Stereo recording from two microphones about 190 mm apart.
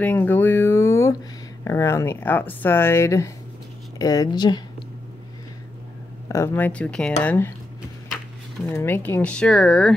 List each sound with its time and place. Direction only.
0.0 s a sound: 10° left (ahead or behind)
1.6 s speech: 15° left (ahead or behind)
6.2 s speech: 15° left (ahead or behind)
8.6 s speech: 10° left (ahead or behind)